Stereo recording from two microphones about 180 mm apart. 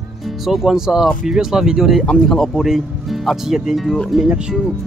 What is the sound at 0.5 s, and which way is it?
Speech, centre (ahead or behind).